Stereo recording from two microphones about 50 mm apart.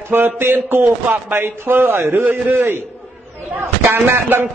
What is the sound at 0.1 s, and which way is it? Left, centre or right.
A man's voice, right.